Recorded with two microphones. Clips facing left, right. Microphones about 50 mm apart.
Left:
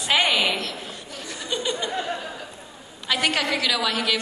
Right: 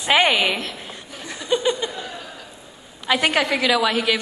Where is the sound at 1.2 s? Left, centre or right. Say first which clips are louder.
Right 7 dB; centre.